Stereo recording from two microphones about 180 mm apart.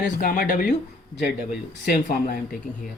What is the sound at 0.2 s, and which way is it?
Speech, 50° left (ahead or behind).